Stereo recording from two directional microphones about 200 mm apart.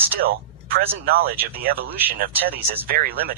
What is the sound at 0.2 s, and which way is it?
Speech, 50° right (ahead or behind).